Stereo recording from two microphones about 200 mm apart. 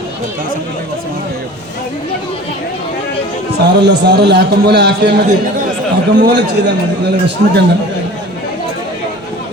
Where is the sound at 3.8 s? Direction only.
55° right (ahead or behind).